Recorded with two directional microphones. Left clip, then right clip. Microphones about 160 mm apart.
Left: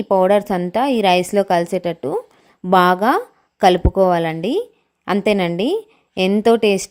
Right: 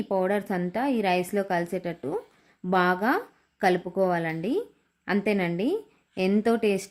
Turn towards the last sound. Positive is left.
turn(degrees=35)  # may be behind; listen again after turning